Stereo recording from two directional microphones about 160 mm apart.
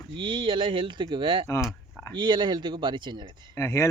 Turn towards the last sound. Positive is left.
turn(degrees=15)  # may be behind; listen again after turning